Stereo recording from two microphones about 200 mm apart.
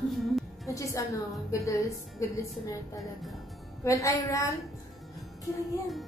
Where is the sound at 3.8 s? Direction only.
15° left (ahead or behind).